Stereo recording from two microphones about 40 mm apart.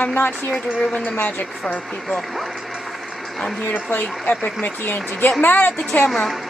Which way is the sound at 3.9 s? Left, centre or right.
Left.